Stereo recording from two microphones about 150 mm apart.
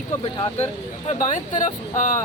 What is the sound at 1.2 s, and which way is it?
Speech, 55° left (ahead or behind).